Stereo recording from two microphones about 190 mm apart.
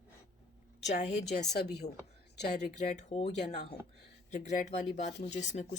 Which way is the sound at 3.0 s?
35° left (ahead or behind).